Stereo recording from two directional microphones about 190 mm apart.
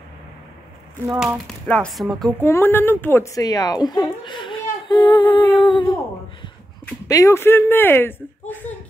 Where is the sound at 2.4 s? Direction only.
10° left (ahead or behind).